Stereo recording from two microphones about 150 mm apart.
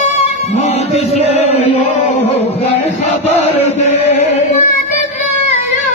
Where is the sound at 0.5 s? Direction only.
45° left (ahead or behind).